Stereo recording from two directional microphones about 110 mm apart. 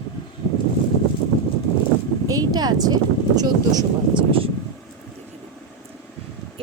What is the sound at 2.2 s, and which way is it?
Speech, 35° right (ahead or behind).